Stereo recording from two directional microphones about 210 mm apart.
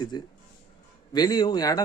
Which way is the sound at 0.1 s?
20° left (ahead or behind).